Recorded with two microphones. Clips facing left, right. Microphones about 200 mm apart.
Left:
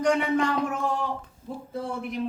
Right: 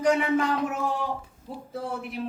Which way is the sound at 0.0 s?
5° right (ahead or behind).